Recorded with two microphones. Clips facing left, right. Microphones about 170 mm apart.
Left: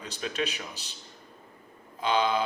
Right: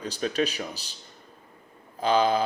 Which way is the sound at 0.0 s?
35° right (ahead or behind).